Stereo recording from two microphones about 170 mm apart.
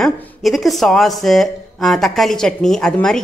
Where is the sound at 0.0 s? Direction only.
Centre (ahead or behind).